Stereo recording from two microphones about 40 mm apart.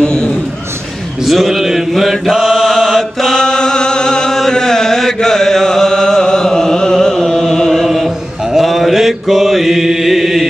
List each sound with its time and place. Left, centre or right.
0.0 s a sound: left
1.2 s mantra: centre
2.0 s chant: centre
7.2 s music: centre
8.5 s mantra: centre